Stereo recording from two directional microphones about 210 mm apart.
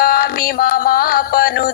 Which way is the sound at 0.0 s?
45° left (ahead or behind).